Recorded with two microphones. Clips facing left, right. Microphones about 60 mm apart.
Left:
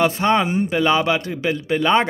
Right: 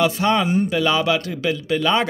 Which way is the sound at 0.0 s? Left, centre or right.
Left.